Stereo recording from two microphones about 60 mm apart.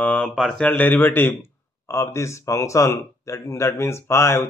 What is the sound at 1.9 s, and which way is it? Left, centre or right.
Speech, left.